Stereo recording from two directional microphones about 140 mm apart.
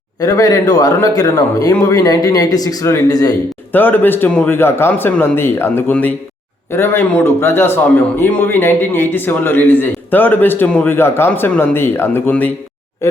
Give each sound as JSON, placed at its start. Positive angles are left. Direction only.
{"t": 0.2, "sound": "speech", "side_deg": 25}
{"t": 3.7, "sound": "a man's voice", "side_deg": 15}